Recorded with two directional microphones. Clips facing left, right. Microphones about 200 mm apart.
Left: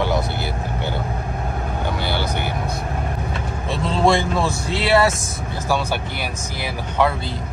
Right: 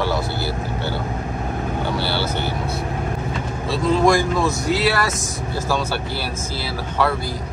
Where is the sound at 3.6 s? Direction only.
25° left (ahead or behind).